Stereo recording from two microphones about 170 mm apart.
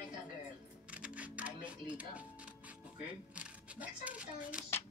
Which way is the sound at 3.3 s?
5° right (ahead or behind).